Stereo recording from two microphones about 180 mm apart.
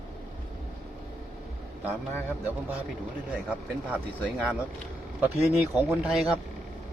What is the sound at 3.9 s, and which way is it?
Speech, 5° right (ahead or behind).